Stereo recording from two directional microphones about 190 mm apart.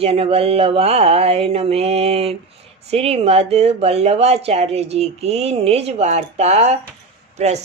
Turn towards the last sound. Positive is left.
turn(degrees=-35)  # may be behind; listen again after turning